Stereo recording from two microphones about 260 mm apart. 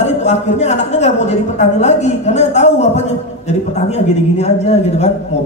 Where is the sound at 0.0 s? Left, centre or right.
Left.